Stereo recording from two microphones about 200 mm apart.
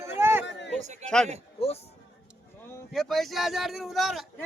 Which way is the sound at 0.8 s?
35° right (ahead or behind).